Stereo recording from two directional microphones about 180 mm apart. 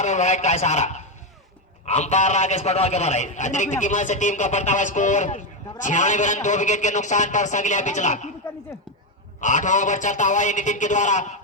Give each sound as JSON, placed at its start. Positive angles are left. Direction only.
{"t": 0.0, "sound": "a man's voice", "side_deg": 40}
{"t": 9.4, "sound": "a man's voice", "side_deg": 45}